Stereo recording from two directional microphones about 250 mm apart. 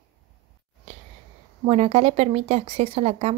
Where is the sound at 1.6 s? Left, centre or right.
Right.